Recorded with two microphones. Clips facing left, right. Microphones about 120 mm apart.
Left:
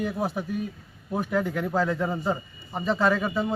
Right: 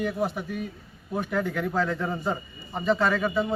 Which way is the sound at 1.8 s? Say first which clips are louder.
Left 4 dB; 5° left (ahead or behind).